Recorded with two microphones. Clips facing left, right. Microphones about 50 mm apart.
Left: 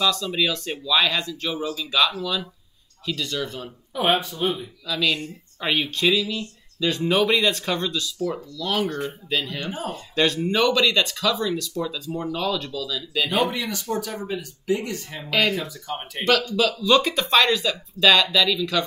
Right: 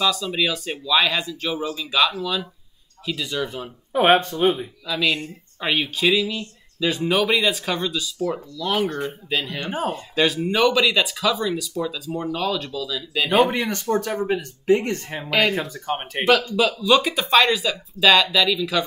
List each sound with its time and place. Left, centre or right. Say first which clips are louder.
0.0 s speech: right 1 dB; centre
3.9 s speech: right 5 dB; right
4.8 s speech: right 1 dB; centre
5.7 s speech: right 1 dB; centre
9.7 s speech: right 5 dB; right
10.1 s speech: even; centre
13.3 s speech: right 7 dB; right
15.2 s speech: right 2 dB; centre
15.5 s speech: right 4 dB; right
16.8 s speech: left 1 dB; centre